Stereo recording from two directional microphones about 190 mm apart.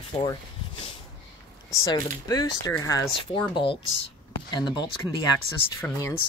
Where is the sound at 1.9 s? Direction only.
20° left (ahead or behind).